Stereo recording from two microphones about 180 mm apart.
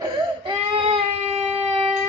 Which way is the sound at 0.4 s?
30° right (ahead or behind).